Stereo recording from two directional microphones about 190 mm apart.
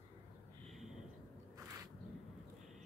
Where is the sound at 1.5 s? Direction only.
15° right (ahead or behind).